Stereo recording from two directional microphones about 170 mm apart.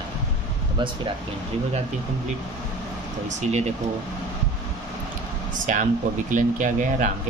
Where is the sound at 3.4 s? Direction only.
40° right (ahead or behind).